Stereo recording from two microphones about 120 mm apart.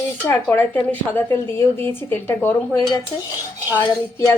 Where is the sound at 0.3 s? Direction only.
15° left (ahead or behind).